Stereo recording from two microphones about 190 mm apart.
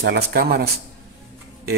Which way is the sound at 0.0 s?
60° right (ahead or behind).